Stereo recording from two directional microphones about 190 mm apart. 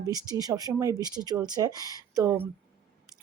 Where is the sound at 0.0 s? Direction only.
20° right (ahead or behind).